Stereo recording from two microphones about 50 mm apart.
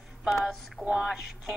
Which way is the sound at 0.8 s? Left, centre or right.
Centre.